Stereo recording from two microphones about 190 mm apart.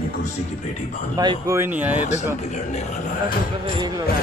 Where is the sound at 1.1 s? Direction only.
20° right (ahead or behind).